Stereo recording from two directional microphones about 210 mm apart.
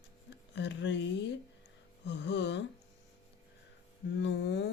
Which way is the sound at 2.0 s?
55° left (ahead or behind).